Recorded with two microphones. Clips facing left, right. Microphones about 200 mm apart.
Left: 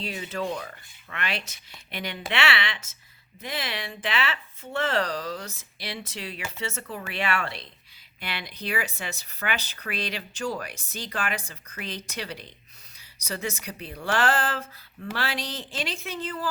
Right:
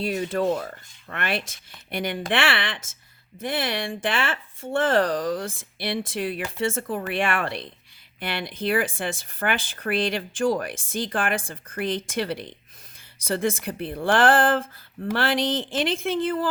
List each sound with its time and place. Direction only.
0.0 s speech: 50° right (ahead or behind)